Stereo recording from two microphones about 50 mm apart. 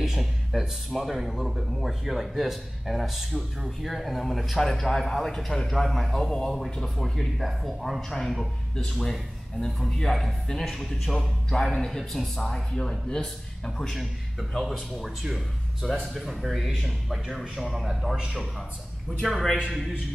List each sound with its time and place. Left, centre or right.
0.0 s speech: centre
9.6 s speech: centre
14.6 s speech: centre
18.1 s a man's voice: centre
19.2 s speech: centre